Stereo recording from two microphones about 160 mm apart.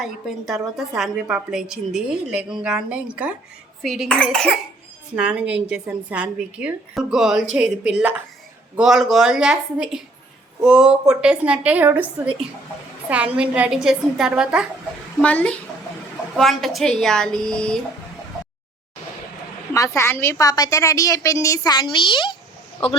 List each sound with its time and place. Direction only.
0.0 s a woman's voice: centre (ahead or behind)
15.2 s a woman's voice: 10° left (ahead or behind)
19.7 s a woman's voice: 20° left (ahead or behind)